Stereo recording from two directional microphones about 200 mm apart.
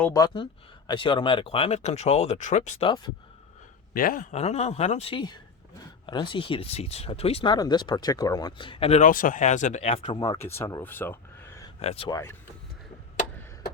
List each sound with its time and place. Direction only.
0.1 s speech: 20° left (ahead or behind); by 2.9 s 35° left (ahead or behind)
3.9 s speech: 45° left (ahead or behind); by 11.7 s 15° left (ahead or behind)
11.8 s speech: 30° left (ahead or behind)
12.1 s speech: 15° left (ahead or behind)